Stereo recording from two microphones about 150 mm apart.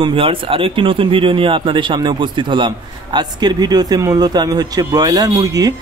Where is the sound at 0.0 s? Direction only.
35° right (ahead or behind).